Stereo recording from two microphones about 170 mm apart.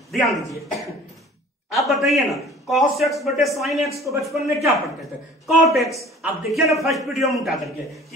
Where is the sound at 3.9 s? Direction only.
20° right (ahead or behind).